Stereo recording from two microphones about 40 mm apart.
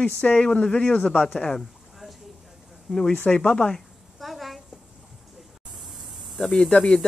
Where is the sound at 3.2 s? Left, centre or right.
Left.